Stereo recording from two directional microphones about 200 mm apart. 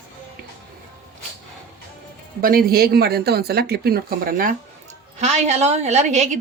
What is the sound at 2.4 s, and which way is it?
A woman's voice, 50° right (ahead or behind).